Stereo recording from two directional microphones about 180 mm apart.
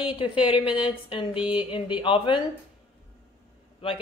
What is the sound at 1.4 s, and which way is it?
Speech, 10° right (ahead or behind).